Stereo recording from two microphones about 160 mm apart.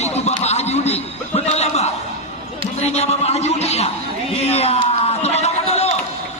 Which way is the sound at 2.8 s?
45° left (ahead or behind).